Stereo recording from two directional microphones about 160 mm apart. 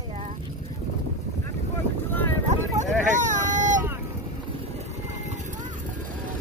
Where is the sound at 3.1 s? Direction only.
50° right (ahead or behind).